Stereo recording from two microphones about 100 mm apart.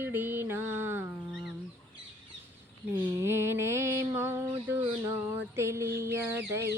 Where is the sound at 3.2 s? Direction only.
25° right (ahead or behind).